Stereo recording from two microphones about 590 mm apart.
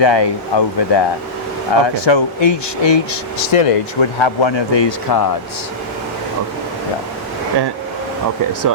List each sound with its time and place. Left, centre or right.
0.0 s speech: left